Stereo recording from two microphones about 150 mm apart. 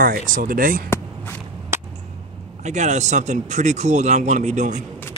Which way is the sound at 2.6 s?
50° right (ahead or behind).